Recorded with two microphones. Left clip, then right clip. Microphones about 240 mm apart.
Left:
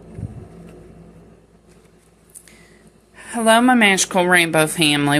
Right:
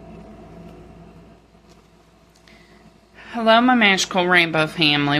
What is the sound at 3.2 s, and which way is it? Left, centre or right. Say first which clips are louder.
A woman's voice: left 1 dB; centre.